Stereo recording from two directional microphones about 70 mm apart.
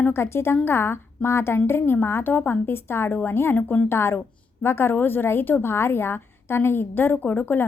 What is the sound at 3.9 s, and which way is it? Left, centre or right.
A woman's voice, left.